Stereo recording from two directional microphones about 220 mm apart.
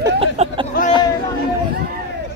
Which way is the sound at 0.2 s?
25° right (ahead or behind).